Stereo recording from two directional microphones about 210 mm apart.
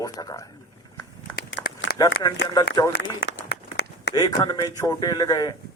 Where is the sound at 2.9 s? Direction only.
55° left (ahead or behind).